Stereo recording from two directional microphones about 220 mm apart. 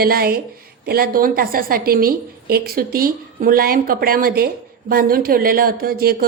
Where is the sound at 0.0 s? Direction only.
45° right (ahead or behind).